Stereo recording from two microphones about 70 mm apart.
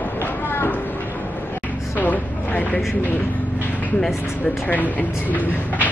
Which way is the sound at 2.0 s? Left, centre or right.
Left.